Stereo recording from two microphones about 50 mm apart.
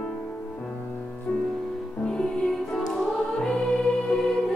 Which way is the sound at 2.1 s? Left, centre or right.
Centre.